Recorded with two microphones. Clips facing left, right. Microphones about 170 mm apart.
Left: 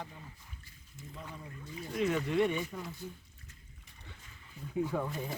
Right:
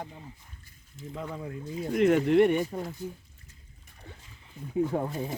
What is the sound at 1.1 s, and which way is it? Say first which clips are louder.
Speech: right 11 dB; 90° right.